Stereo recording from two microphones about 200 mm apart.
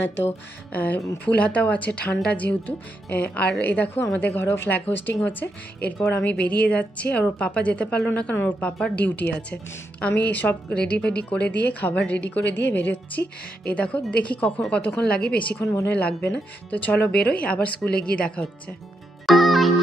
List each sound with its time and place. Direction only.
0.2 s a woman's voice: 10° left (ahead or behind)
19.2 s music: centre (ahead or behind)